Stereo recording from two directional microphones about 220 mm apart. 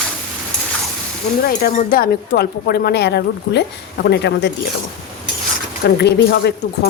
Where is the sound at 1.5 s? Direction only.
40° left (ahead or behind).